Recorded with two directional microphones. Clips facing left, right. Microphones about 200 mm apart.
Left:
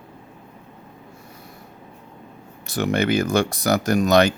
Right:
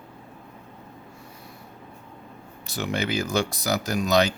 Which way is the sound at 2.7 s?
55° left (ahead or behind).